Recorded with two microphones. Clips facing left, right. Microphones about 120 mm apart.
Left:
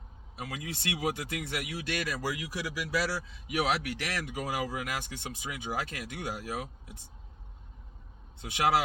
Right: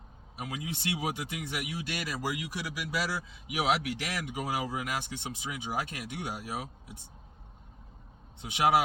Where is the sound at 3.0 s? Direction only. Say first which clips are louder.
Left 2 dB; 15° right (ahead or behind).